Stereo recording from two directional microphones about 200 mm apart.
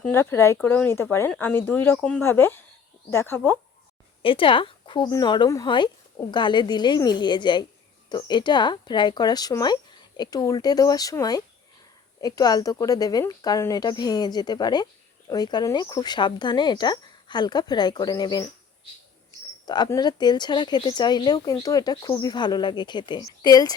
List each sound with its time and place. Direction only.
0.0 s speech: 10° left (ahead or behind)
4.2 s speech: 25° left (ahead or behind)
19.6 s speech: 20° left (ahead or behind)